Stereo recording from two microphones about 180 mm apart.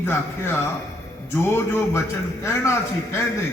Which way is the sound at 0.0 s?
15° left (ahead or behind).